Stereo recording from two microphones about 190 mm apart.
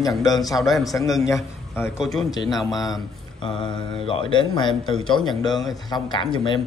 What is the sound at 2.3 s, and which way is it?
Speech, 20° left (ahead or behind).